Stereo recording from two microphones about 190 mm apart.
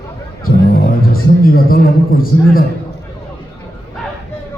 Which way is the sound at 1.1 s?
50° left (ahead or behind).